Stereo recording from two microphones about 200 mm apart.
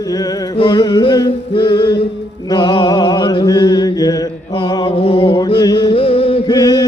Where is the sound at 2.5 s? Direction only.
25° left (ahead or behind).